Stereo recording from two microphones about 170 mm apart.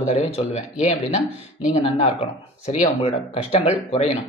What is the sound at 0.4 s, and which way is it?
Speech, 40° left (ahead or behind).